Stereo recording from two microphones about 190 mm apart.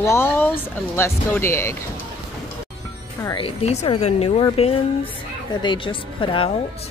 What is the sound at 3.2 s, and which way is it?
Speech, 25° left (ahead or behind).